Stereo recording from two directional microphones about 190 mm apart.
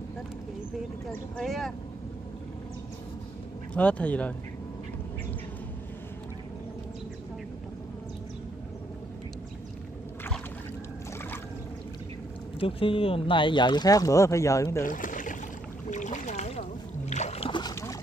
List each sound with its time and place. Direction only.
1.1 s speech: centre (ahead or behind)
3.7 s speech: 5° left (ahead or behind)
12.5 s speech: 30° left (ahead or behind)
14.9 s boat: 45° left (ahead or behind); by 17.9 s 20° left (ahead or behind)